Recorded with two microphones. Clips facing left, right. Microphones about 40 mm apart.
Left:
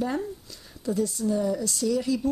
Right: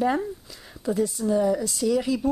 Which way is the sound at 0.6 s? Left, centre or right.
Right.